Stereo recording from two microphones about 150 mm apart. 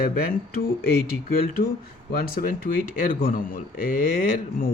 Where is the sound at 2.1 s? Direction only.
85° left.